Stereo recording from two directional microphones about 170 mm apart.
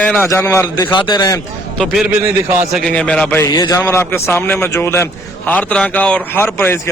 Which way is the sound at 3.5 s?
20° left (ahead or behind).